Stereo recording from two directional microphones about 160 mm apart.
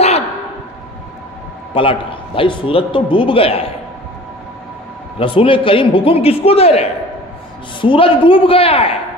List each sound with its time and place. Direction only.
1.7 s a man's voice: 35° left (ahead or behind)
5.2 s a man's voice: 35° left (ahead or behind)